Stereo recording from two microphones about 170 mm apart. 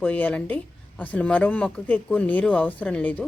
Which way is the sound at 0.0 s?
10° left (ahead or behind).